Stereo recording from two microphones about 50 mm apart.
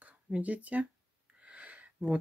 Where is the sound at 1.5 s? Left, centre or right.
Right.